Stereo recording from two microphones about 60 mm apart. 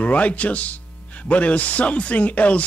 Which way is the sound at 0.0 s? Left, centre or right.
Left.